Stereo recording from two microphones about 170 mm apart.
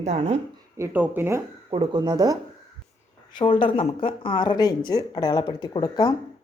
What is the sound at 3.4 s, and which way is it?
Speech, 30° left (ahead or behind).